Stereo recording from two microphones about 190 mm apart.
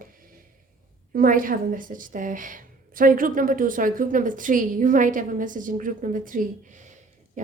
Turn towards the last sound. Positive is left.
turn(degrees=-40)  # may be behind; listen again after turning